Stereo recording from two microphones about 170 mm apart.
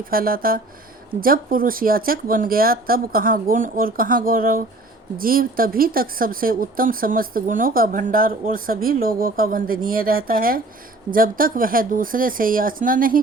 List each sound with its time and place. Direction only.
0.0 s speech: 60° right (ahead or behind)